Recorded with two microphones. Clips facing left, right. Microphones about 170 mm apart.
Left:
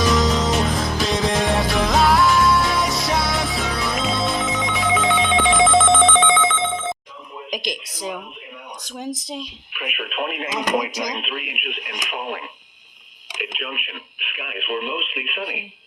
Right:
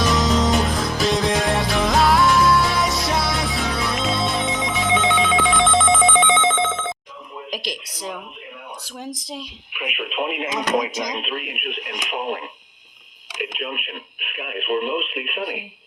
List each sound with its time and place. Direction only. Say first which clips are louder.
0.1 s music: even; centre (ahead or behind)
6.1 s telephone bell ringing: even; 20° right (ahead or behind)
7.5 s a sound: left 2 dB; centre (ahead or behind)
9.2 s speech: left 2 dB; centre (ahead or behind)
9.7 s speech: right 2 dB; 15° right (ahead or behind)
11.2 s speech: right 2 dB; 40° right (ahead or behind)
11.9 s speech: right 3 dB; 5° left (ahead or behind)
13.4 s speech: right 2 dB; 40° right (ahead or behind)